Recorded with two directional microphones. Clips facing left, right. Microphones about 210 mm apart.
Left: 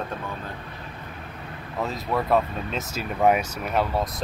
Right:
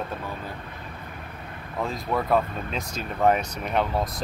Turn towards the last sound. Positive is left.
turn(degrees=0)  # may be behind; listen again after turning